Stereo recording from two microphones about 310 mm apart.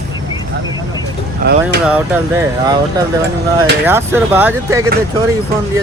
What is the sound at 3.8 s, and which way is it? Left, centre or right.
Speech, centre.